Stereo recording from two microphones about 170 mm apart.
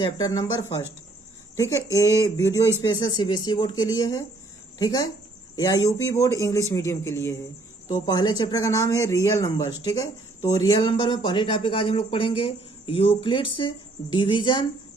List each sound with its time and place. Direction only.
0.0 s a man's voice: 20° left (ahead or behind)
10.8 s speech: 30° left (ahead or behind)